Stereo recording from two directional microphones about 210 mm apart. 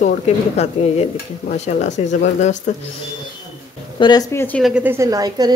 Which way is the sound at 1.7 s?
35° left (ahead or behind).